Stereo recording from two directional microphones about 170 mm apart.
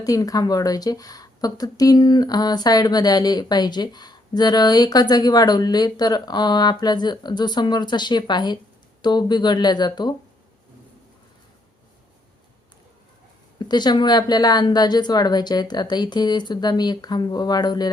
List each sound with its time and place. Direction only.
0.0 s speech: 20° left (ahead or behind)
13.6 s speech: 25° left (ahead or behind)